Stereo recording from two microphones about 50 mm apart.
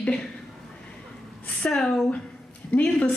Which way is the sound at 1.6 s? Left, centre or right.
Centre.